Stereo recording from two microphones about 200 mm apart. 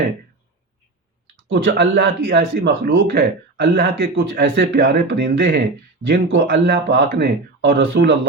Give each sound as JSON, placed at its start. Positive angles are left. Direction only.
{"t": 1.5, "sound": "speech", "side_deg": -60}